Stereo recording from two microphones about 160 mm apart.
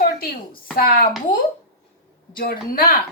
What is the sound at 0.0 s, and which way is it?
Speech, 65° left (ahead or behind).